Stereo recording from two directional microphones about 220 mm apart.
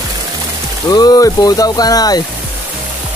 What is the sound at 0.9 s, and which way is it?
Speech, 15° left (ahead or behind).